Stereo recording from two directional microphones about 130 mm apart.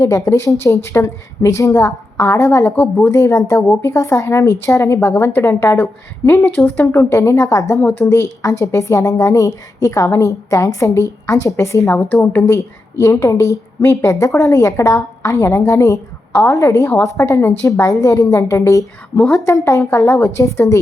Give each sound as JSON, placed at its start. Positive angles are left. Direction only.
{"t": 0.0, "sound": "a woman's voice", "side_deg": 25}